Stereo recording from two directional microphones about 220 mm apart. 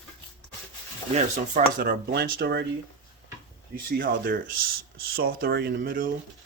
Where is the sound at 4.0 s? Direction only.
40° right (ahead or behind).